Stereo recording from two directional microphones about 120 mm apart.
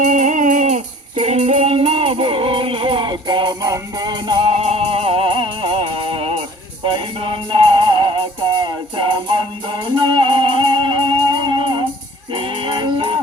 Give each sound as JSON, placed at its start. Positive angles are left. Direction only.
{"t": 0.0, "sound": "music", "side_deg": -90}
{"t": 1.2, "sound": "female singing", "side_deg": -65}
{"t": 1.7, "sound": "music", "side_deg": -50}